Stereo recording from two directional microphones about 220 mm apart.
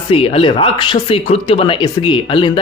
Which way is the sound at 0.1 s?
25° left (ahead or behind).